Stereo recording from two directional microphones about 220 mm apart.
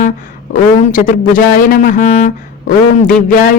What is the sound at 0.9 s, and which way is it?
A man's voice, 40° left (ahead or behind).